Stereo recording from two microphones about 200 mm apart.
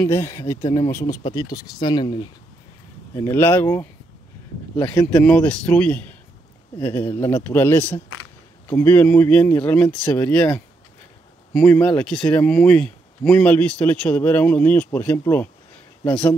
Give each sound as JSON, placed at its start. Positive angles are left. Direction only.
{"t": 0.0, "sound": "speech", "side_deg": 15}
{"t": 3.2, "sound": "speech", "side_deg": 15}